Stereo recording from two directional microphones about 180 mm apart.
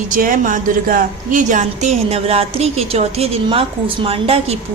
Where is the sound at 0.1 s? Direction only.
50° right (ahead or behind).